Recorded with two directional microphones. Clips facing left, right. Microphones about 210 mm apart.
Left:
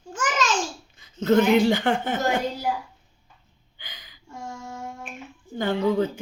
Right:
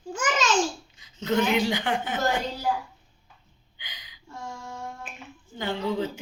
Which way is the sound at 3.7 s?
50° left (ahead or behind).